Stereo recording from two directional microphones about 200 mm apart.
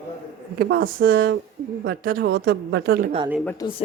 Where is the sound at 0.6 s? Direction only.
60° right (ahead or behind).